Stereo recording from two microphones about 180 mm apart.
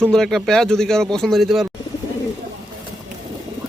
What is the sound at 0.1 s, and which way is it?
Speech, 5° left (ahead or behind).